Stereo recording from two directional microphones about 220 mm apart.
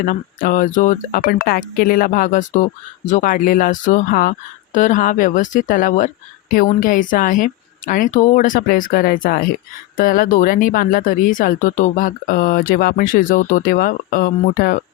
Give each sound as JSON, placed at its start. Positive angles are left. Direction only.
{"t": 0.0, "sound": "speech", "side_deg": 40}